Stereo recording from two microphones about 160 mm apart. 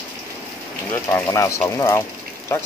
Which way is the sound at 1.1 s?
20° left (ahead or behind).